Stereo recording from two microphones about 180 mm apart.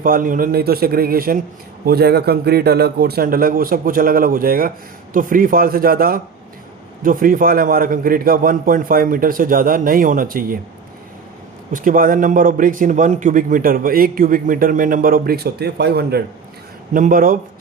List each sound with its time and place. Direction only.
0.0 s a man's voice: 50° right (ahead or behind)
11.7 s a man's voice: 50° right (ahead or behind)
16.9 s a man's voice: 50° right (ahead or behind)